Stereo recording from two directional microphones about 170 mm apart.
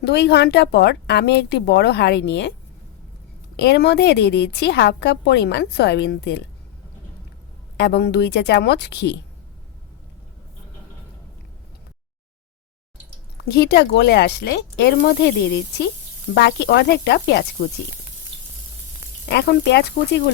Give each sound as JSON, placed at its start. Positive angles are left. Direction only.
{"t": 0.0, "sound": "a woman's voice", "side_deg": 75}
{"t": 3.6, "sound": "a woman's voice", "side_deg": 75}
{"t": 7.8, "sound": "a woman's voice", "side_deg": 75}
{"t": 13.5, "sound": "a woman's voice", "side_deg": 75}
{"t": 16.3, "sound": "sizzle", "side_deg": 85}
{"t": 19.3, "sound": "a woman's voice", "side_deg": 75}